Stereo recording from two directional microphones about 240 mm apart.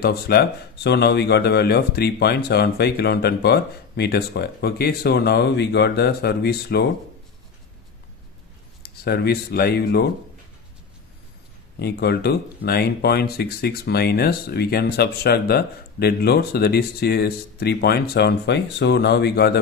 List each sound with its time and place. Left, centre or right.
0.0 s speech: left
8.8 s speech: left
11.8 s speech: left